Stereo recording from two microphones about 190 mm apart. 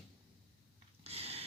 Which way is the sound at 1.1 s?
30° right (ahead or behind).